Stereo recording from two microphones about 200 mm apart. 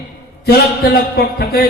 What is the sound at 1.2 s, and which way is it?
Speech, 55° left (ahead or behind).